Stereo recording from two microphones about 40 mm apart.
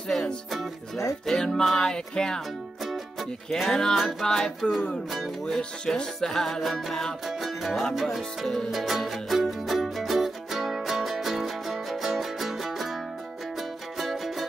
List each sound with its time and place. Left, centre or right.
0.1 s music: centre
2.8 s music: centre
3.5 s music: centre
5.9 s music: centre
7.2 s music: centre
13.9 s music: centre